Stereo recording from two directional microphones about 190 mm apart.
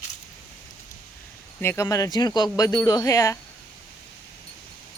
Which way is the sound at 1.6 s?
15° left (ahead or behind).